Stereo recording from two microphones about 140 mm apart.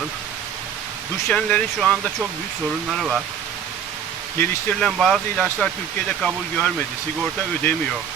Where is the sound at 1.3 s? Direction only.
5° left (ahead or behind).